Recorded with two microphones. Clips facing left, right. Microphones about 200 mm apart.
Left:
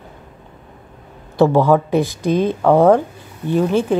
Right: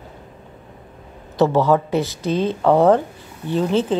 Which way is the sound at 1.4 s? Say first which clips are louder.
Left 3 dB; 15° left (ahead or behind).